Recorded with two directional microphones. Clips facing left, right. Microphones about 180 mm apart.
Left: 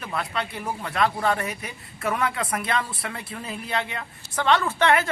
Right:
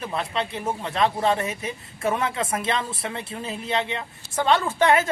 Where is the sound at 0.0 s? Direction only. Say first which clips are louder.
Right 2 dB; 25° right (ahead or behind).